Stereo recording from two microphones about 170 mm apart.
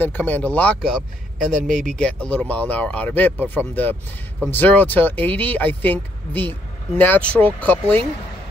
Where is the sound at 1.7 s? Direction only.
45° right (ahead or behind).